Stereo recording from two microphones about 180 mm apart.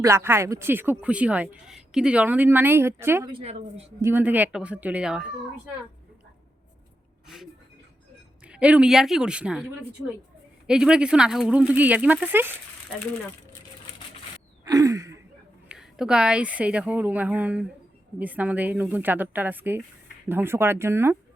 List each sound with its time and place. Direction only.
0.0 s speech: 15° right (ahead or behind)
3.2 s a woman's voice: 30° right (ahead or behind)
4.0 s speech: 10° right (ahead or behind)
8.4 s a woman's voice: 5° right (ahead or behind)
10.7 s speech: 5° right (ahead or behind)
14.7 s a sound: 20° right (ahead or behind)
15.7 s speech: 5° right (ahead or behind)